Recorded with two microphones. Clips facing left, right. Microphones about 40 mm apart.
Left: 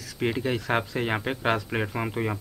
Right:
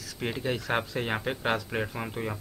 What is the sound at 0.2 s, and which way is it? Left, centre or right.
Speech, centre.